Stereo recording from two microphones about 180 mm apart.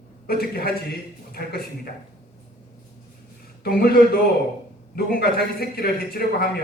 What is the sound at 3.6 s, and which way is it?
A man's voice, 55° left (ahead or behind).